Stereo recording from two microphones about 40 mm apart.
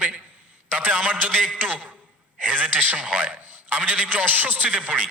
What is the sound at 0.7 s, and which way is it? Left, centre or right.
Speech, right.